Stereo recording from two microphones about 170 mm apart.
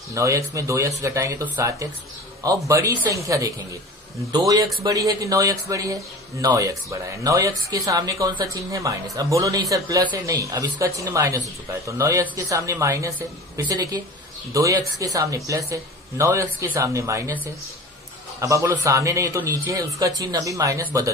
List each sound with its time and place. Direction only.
0.1 s speech: 20° right (ahead or behind)
4.8 s speech: 20° right (ahead or behind)
18.4 s speech: 20° right (ahead or behind)